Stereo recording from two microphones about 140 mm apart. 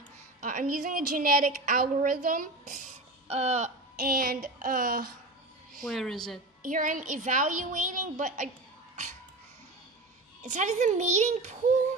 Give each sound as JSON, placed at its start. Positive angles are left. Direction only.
{"t": 0.4, "sound": "a woman's voice", "side_deg": -70}
{"t": 3.3, "sound": "speech", "side_deg": -50}
{"t": 4.0, "sound": "child singing", "side_deg": -90}
{"t": 5.9, "sound": "a woman's voice", "side_deg": 0}
{"t": 6.7, "sound": "a woman's voice", "side_deg": -70}
{"t": 10.4, "sound": "a woman's voice", "side_deg": -60}